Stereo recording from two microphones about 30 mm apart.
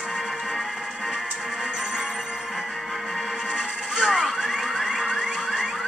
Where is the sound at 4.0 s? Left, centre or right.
Centre.